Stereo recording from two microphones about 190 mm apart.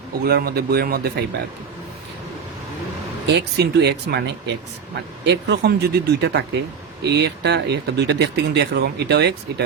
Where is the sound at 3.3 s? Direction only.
60° right (ahead or behind).